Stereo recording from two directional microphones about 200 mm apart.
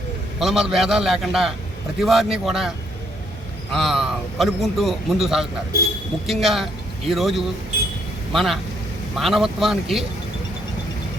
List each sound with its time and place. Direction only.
0.3 s a man's voice: centre (ahead or behind)